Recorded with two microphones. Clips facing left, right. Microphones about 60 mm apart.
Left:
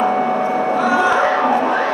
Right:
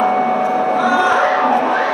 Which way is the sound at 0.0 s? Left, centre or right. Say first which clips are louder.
Right 2 dB; right.